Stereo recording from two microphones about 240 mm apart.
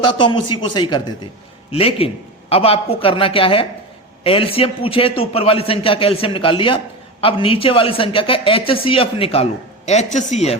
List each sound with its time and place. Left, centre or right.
0.0 s speech: centre